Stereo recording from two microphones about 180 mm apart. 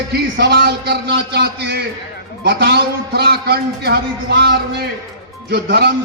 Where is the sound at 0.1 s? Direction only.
65° right (ahead or behind).